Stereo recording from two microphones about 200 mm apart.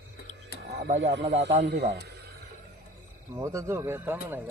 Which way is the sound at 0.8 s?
50° right (ahead or behind).